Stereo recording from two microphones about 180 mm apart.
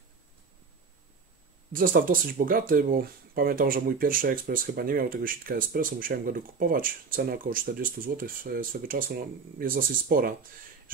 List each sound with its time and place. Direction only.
1.7 s speech: 50° right (ahead or behind)